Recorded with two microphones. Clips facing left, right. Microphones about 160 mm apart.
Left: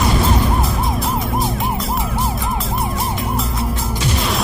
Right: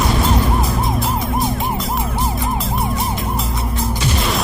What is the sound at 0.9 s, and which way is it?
Emergency vehicle, centre (ahead or behind).